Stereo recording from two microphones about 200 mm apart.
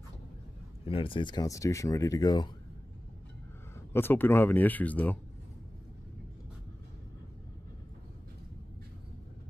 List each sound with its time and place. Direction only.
0.8 s speech: 25° left (ahead or behind)
3.9 s speech: 10° left (ahead or behind)